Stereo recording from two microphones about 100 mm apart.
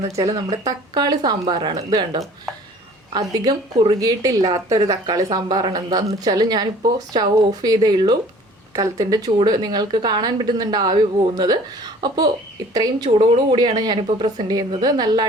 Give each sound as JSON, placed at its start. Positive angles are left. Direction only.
{"t": 0.0, "sound": "a woman's voice", "side_deg": -40}
{"t": 13.1, "sound": "speech", "side_deg": -70}
{"t": 13.6, "sound": "speech", "side_deg": -45}